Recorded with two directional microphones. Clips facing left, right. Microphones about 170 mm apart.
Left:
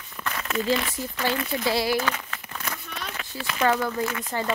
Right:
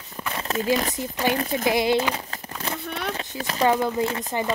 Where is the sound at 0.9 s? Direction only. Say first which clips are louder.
Right 3 dB; 20° right (ahead or behind).